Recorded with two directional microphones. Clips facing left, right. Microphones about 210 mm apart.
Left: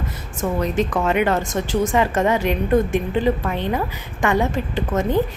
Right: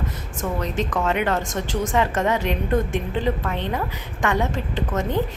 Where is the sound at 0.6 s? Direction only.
10° left (ahead or behind).